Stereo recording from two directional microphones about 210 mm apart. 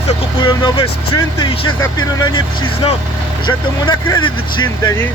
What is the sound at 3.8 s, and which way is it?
Speech, 20° left (ahead or behind).